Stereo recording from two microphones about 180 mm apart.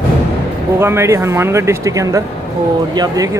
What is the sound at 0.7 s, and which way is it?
Speech, 15° right (ahead or behind).